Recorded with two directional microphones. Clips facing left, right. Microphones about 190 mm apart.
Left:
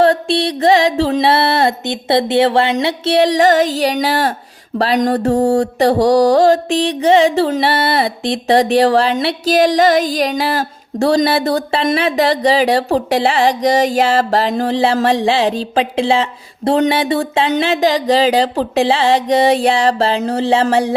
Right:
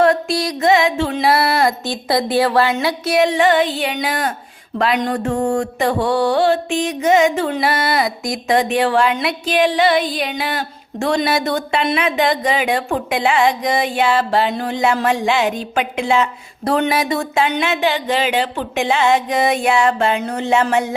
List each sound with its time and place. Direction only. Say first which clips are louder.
0.0 s mantra: left 2 dB; 30° left (ahead or behind)